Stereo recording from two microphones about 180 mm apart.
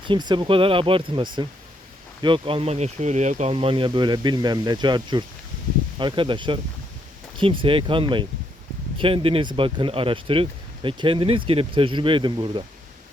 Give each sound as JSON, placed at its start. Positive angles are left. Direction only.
{"t": 0.0, "sound": "speech", "side_deg": -25}